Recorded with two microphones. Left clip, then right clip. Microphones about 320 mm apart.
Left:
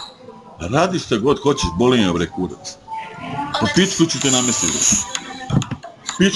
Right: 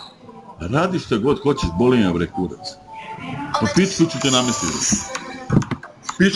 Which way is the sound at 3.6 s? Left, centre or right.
Centre.